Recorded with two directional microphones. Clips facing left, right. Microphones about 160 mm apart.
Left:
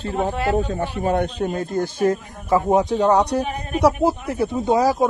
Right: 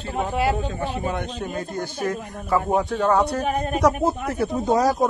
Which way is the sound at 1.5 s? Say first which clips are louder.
Left 5 dB; 50° left (ahead or behind).